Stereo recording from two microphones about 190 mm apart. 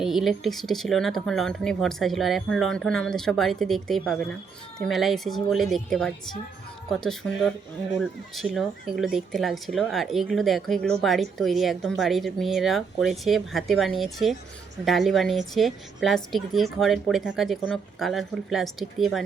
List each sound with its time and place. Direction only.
0.0 s speech: centre (ahead or behind)